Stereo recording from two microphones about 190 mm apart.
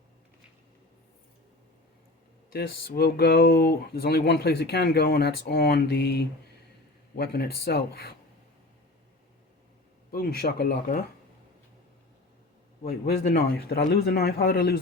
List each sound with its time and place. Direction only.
2.5 s speech: 55° left (ahead or behind)
10.1 s speech: 55° left (ahead or behind)
12.8 s speech: 55° left (ahead or behind)